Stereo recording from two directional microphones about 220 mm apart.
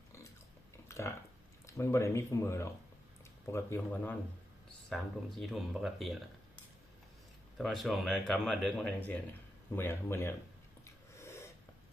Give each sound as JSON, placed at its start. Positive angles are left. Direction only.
{"t": 0.9, "sound": "a sound", "side_deg": 10}
{"t": 1.6, "sound": "speech", "side_deg": 15}
{"t": 4.9, "sound": "speech", "side_deg": 0}
{"t": 7.6, "sound": "speech", "side_deg": 0}
{"t": 10.8, "sound": "snort", "side_deg": 15}